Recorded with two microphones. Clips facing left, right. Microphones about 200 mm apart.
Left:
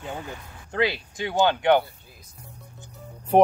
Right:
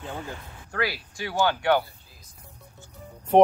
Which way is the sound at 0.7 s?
20° left (ahead or behind).